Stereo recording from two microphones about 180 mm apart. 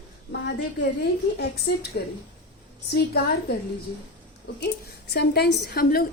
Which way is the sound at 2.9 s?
65° left (ahead or behind).